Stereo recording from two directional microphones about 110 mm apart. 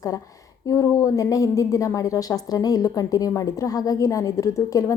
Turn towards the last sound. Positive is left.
turn(degrees=30)  # may be behind; listen again after turning